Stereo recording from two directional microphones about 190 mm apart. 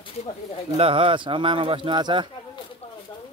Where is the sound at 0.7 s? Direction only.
30° right (ahead or behind).